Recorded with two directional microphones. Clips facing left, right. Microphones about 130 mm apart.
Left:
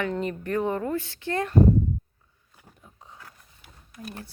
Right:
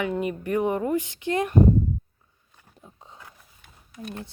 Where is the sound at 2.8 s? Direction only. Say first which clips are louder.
Right 2 dB; 15° right (ahead or behind).